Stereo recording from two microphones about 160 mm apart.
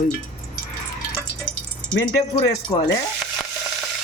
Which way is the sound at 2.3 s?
35° left (ahead or behind).